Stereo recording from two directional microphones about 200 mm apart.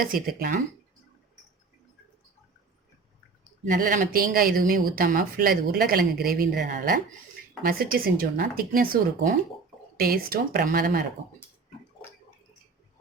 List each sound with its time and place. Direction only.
0.0 s speech: 45° right (ahead or behind)
3.7 s speech: 40° right (ahead or behind)